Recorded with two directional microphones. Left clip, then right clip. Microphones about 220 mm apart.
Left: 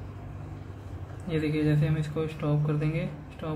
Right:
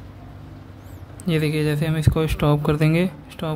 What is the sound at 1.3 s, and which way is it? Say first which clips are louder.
Speech: right 6 dB; 50° right (ahead or behind).